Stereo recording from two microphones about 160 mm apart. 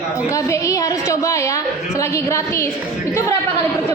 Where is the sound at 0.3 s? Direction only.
20° left (ahead or behind).